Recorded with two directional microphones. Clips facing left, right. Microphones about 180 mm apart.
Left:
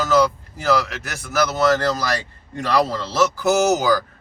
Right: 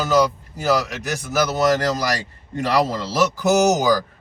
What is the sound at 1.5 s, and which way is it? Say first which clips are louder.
Speech: even; 15° right (ahead or behind).